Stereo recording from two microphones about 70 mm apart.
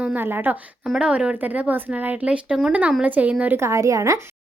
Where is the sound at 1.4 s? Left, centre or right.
Right.